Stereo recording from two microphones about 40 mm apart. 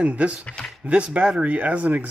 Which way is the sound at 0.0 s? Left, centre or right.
Right.